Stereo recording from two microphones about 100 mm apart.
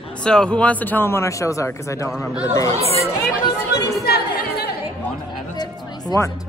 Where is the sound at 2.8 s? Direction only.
90° right.